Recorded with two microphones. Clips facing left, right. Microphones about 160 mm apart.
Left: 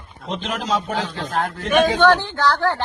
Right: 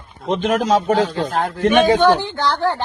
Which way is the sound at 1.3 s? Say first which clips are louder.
Right 2 dB; 30° right (ahead or behind).